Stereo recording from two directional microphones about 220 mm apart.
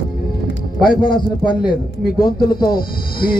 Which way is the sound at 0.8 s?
40° left (ahead or behind).